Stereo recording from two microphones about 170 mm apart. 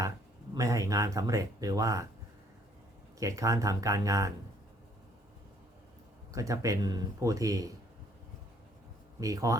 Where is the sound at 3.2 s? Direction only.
20° right (ahead or behind).